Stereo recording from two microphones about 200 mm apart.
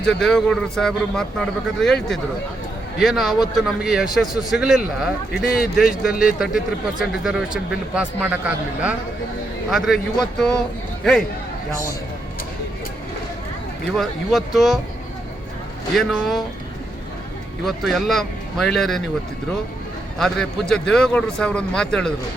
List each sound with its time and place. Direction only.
0.0 s a man's voice: 5° left (ahead or behind)
13.9 s a man's voice: centre (ahead or behind)
16.0 s a man's voice: centre (ahead or behind)
17.7 s a man's voice: centre (ahead or behind)
20.1 s a man's voice: 5° left (ahead or behind)